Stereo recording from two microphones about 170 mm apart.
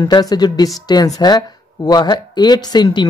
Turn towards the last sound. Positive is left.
turn(degrees=25)  # may be behind; listen again after turning